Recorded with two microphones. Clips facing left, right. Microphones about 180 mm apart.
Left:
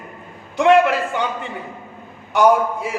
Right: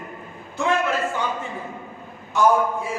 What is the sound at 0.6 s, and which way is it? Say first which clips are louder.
A man's voice: left 8 dB; 75° left (ahead or behind).